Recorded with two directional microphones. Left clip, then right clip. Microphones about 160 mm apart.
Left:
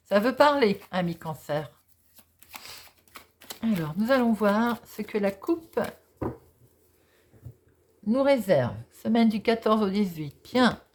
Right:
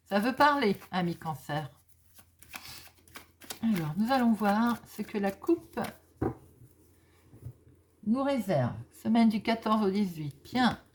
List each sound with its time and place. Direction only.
0.1 s speech: 30° left (ahead or behind)
2.5 s a sound: centre (ahead or behind)
3.9 s speech: 35° left (ahead or behind)
8.1 s speech: 40° left (ahead or behind)
9.0 s speech: 20° left (ahead or behind)